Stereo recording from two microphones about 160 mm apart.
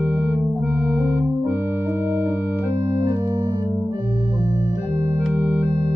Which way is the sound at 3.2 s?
25° right (ahead or behind).